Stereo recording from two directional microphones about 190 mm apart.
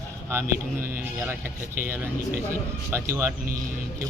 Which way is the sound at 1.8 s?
10° right (ahead or behind).